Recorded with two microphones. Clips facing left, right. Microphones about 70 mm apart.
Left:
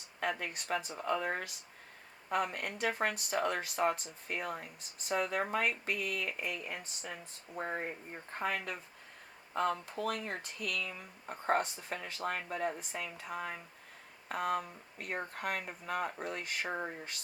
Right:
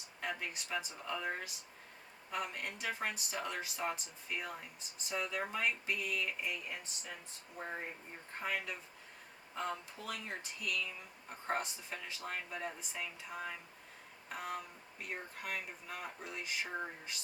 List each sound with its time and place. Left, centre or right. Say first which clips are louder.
0.2 s speech: left 5 dB; left